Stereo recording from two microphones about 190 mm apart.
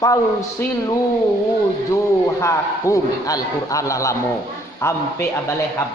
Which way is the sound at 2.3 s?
15° left (ahead or behind).